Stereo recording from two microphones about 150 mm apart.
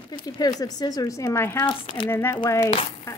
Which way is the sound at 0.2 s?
25° left (ahead or behind).